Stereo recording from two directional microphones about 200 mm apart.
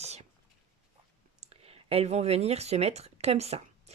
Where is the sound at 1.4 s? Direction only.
30° right (ahead or behind).